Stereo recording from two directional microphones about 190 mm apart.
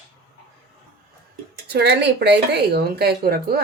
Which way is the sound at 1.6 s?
60° right (ahead or behind).